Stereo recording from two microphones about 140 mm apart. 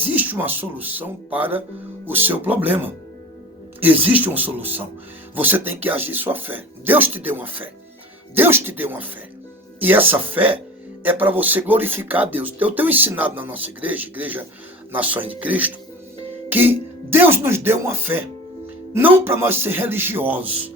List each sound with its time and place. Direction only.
0.0 s speech: 10° right (ahead or behind)